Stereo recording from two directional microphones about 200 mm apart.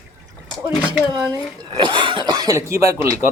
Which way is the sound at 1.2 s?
20° right (ahead or behind).